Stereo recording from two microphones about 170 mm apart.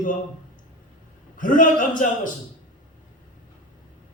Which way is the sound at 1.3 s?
50° left (ahead or behind).